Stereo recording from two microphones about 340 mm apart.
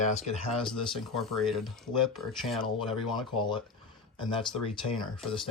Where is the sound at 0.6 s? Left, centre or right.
Centre.